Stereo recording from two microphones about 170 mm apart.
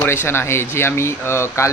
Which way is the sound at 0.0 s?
15° left (ahead or behind).